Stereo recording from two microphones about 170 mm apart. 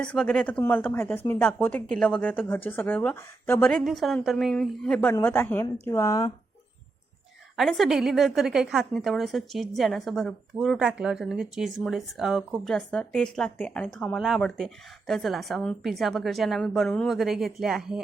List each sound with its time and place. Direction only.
0.0 s a woman's voice: 5° left (ahead or behind)
7.5 s a woman's voice: centre (ahead or behind)